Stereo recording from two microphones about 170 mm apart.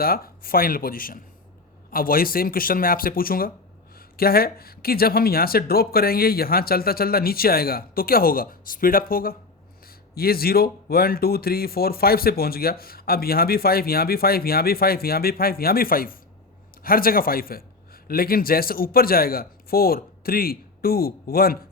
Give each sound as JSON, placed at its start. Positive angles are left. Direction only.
{"t": 0.0, "sound": "a man's voice", "side_deg": 60}